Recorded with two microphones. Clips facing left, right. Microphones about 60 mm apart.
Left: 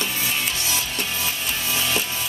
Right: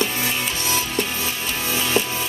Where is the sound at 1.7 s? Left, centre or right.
Right.